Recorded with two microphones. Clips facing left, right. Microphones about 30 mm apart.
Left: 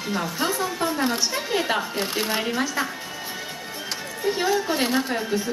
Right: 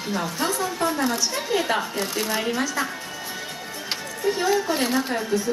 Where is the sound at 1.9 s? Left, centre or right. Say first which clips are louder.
Even; left.